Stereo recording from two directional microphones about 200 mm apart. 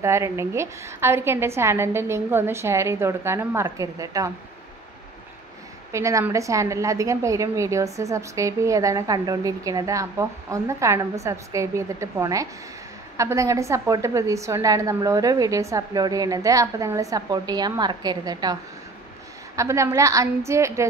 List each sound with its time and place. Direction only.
0.0 s a woman's voice: 15° right (ahead or behind)
5.9 s a woman's voice: 15° right (ahead or behind)